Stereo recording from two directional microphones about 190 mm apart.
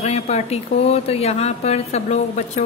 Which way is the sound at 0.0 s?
35° left (ahead or behind).